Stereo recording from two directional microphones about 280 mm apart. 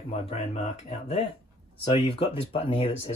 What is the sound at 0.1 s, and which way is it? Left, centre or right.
Speech, left.